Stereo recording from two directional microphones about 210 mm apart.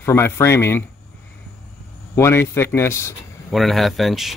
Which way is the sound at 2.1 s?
10° left (ahead or behind).